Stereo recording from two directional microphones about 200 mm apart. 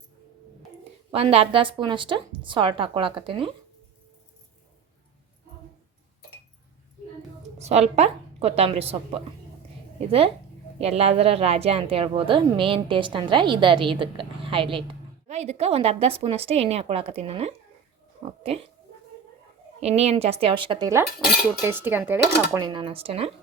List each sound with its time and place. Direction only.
1.1 s a woman's voice: 30° right (ahead or behind)
7.6 s a woman's voice: 30° right (ahead or behind)
19.8 s a woman's voice: 30° right (ahead or behind)
21.6 s cutlery: 10° right (ahead or behind)
22.5 s a woman's voice: 20° right (ahead or behind)